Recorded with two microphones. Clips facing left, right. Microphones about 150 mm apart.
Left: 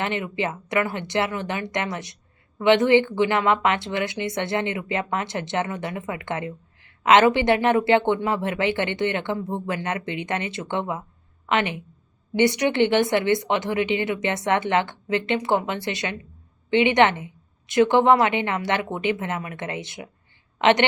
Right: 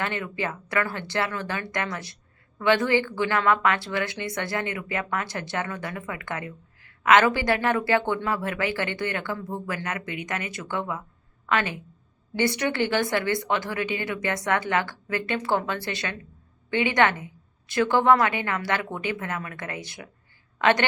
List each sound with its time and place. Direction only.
0.0 s a woman's voice: 20° left (ahead or behind)